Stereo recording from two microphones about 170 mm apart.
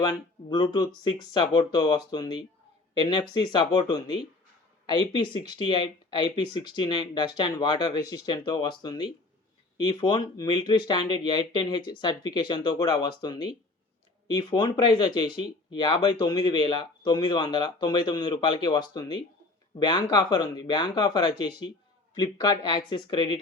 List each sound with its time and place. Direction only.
0.0 s speech: 25° left (ahead or behind)